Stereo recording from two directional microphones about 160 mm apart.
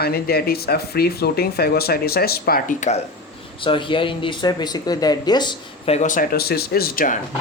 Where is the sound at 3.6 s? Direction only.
30° left (ahead or behind).